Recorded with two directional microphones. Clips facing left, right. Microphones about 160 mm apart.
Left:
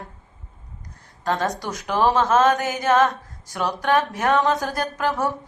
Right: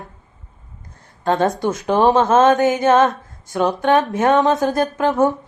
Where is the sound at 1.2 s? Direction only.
25° right (ahead or behind).